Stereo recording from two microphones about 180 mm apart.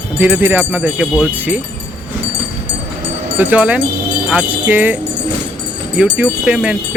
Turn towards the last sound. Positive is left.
turn(degrees=-5)  # may be behind; listen again after turning